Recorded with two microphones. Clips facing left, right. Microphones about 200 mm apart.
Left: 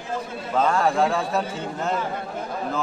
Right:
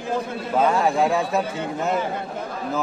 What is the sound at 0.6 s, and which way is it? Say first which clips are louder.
A man's voice: right 1 dB; 5° right (ahead or behind).